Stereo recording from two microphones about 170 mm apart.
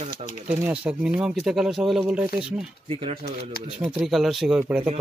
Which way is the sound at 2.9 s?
35° right (ahead or behind).